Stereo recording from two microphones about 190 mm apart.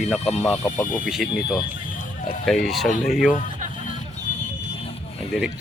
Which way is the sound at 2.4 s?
Centre (ahead or behind).